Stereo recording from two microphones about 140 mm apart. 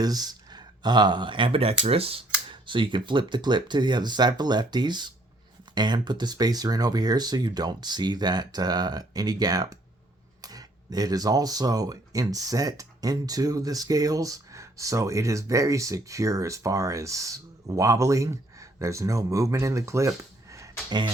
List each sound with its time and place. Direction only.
0.0 s speech: 30° right (ahead or behind)